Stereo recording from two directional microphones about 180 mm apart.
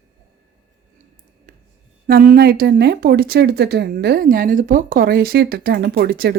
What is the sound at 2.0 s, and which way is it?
Speech, 55° right (ahead or behind).